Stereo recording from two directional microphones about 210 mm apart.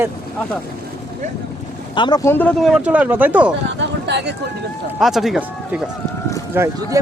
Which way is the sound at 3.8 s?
55° right (ahead or behind).